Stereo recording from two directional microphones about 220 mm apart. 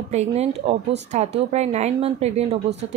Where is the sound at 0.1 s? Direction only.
30° right (ahead or behind).